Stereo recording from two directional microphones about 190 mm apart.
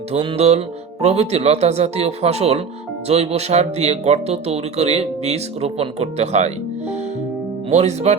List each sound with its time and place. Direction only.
0.1 s speech: 30° right (ahead or behind)